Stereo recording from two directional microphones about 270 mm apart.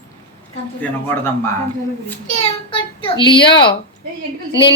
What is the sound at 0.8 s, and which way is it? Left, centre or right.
Speech, centre.